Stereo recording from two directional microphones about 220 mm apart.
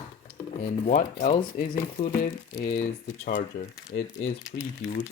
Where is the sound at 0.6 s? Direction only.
35° left (ahead or behind).